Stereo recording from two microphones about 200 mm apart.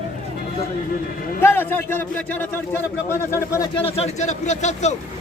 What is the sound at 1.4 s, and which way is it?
Speech, 10° left (ahead or behind).